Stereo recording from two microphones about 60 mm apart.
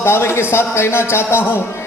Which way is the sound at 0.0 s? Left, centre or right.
Left.